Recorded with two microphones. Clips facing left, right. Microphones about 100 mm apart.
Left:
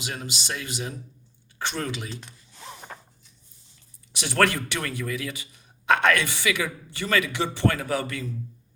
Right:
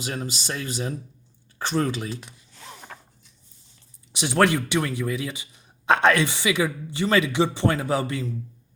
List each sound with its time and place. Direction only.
0.0 s speech: 40° right (ahead or behind)
2.7 s zipper: 5° left (ahead or behind)
4.1 s speech: 20° right (ahead or behind)